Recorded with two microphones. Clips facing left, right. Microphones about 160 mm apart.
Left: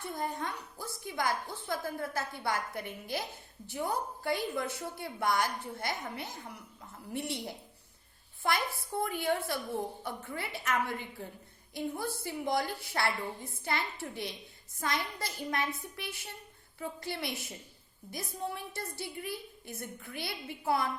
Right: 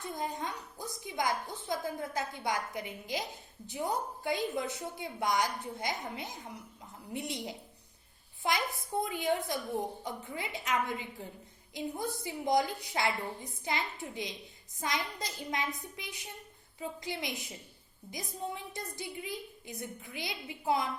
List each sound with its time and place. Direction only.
0.0 s a woman's voice: 20° right (ahead or behind)